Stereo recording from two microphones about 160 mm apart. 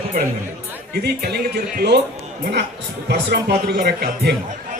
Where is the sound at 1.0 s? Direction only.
85° right.